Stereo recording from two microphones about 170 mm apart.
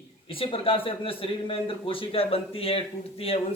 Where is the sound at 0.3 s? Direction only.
30° left (ahead or behind).